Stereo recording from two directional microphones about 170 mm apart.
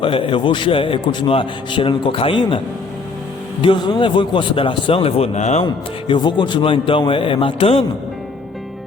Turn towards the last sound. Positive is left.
turn(degrees=35)  # may be behind; listen again after turning